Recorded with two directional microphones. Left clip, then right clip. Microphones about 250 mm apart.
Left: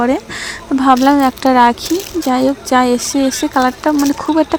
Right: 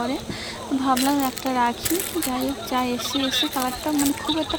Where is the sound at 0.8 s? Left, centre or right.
Left.